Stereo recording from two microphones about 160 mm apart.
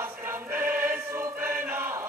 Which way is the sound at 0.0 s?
15° right (ahead or behind).